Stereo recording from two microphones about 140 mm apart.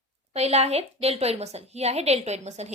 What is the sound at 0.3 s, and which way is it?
A woman's voice, 50° right (ahead or behind).